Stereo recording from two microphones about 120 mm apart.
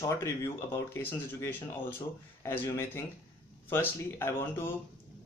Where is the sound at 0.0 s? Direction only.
20° left (ahead or behind).